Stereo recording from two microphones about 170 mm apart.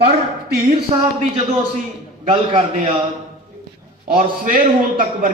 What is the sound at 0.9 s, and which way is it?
Speech, 25° right (ahead or behind).